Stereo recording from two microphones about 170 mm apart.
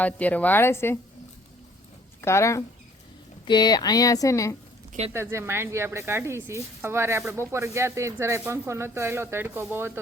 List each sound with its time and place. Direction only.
0.0 s a woman's voice: 10° left (ahead or behind)
2.2 s a woman's voice: 15° left (ahead or behind)
5.1 s speech: 15° right (ahead or behind)